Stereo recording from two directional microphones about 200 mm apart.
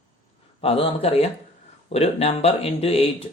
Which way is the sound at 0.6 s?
30° left (ahead or behind).